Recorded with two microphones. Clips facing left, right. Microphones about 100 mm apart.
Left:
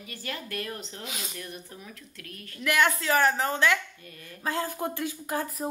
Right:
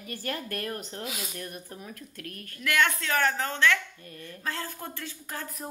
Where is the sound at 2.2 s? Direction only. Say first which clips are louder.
Right 2 dB; 50° right (ahead or behind).